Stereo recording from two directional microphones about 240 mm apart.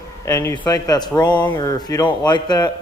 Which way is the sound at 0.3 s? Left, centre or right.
Centre.